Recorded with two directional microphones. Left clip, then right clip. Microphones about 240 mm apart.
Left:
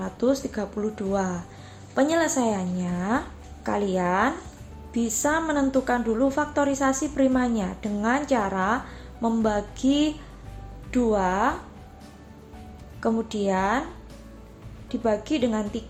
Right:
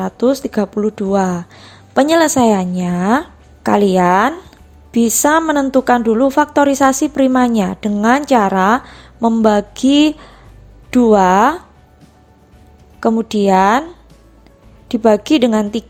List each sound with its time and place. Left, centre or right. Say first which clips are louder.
0.0 s a woman's voice: right 9 dB; right
13.0 s a woman's voice: right 11 dB; right
14.8 s a woman's voice: right 13 dB; right